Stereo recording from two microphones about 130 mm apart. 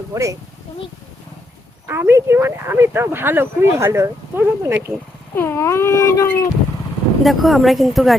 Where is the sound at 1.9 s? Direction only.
20° right (ahead or behind).